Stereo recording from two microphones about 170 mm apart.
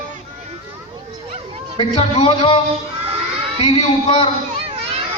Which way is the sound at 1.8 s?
35° left (ahead or behind).